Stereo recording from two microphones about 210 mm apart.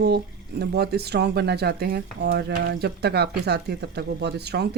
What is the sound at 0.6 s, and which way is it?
A woman's voice, 50° right (ahead or behind).